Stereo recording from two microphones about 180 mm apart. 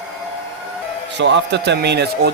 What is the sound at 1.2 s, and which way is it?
Speech, 75° right (ahead or behind).